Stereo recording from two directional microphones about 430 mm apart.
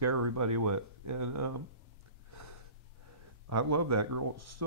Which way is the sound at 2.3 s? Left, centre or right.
Right.